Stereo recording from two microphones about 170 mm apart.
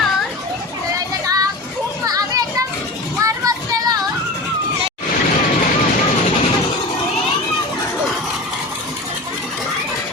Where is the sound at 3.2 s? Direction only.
20° right (ahead or behind).